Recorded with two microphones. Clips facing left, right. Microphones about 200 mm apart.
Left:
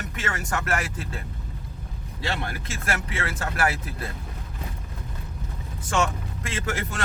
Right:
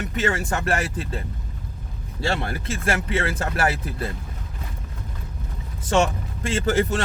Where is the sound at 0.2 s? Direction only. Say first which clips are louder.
Right 6 dB; 30° right (ahead or behind).